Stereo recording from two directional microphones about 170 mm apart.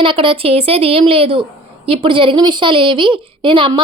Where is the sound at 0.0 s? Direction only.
30° right (ahead or behind).